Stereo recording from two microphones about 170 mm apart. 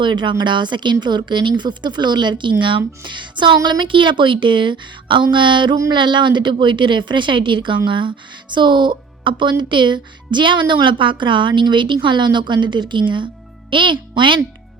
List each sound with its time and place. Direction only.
0.0 s a child's voice: 30° right (ahead or behind)